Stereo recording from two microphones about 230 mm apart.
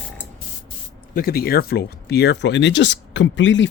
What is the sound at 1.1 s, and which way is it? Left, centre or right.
Speech, left.